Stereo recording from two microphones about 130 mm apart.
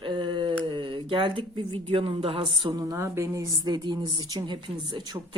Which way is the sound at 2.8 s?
20° right (ahead or behind).